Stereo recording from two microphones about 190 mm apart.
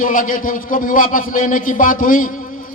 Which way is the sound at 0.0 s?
45° left (ahead or behind).